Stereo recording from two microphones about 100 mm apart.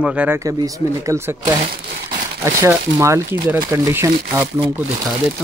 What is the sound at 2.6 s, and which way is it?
Speech, 30° right (ahead or behind).